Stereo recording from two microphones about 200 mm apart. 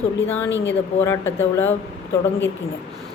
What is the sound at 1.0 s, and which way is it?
Speech, 15° left (ahead or behind).